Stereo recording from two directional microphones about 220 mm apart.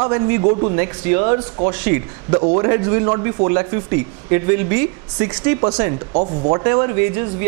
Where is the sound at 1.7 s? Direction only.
10° right (ahead or behind).